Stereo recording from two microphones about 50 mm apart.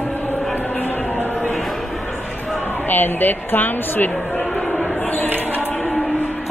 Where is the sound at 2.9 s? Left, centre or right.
Left.